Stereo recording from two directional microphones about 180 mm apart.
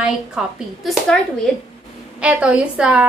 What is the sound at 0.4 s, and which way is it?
A woman's voice, 5° right (ahead or behind).